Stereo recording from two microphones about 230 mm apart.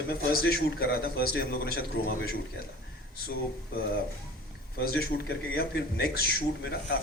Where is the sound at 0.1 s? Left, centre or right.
Left.